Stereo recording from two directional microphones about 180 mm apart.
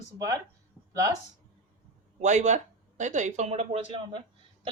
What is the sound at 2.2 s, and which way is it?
Speech, 40° right (ahead or behind).